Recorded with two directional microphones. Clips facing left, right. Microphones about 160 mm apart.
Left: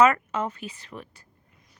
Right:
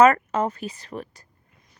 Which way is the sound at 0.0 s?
40° right (ahead or behind).